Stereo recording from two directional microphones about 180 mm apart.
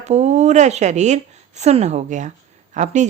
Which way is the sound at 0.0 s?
40° right (ahead or behind).